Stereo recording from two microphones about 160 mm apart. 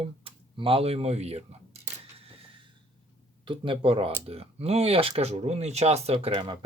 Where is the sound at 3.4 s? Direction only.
30° right (ahead or behind).